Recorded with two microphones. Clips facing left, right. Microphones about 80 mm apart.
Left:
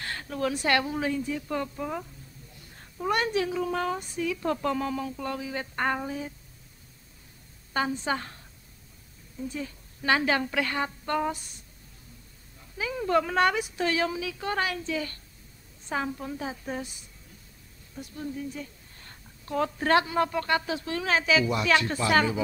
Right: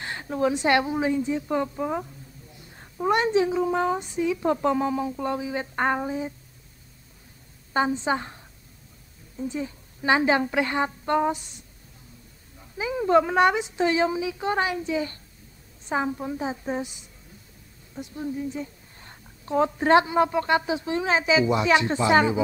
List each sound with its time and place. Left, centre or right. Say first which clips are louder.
0.0 s a woman's voice: right 5 dB; right
7.7 s a woman's voice: right 4 dB; right
9.4 s a woman's voice: right 5 dB; right
12.7 s a woman's voice: right 5 dB; centre